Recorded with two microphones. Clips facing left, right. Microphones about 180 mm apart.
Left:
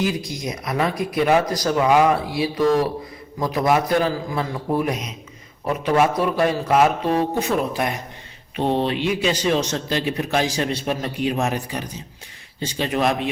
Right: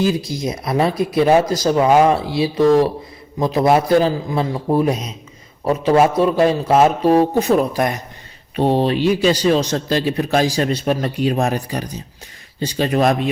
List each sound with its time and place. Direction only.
0.3 s speech: 30° right (ahead or behind)
7.1 s speech: 40° right (ahead or behind)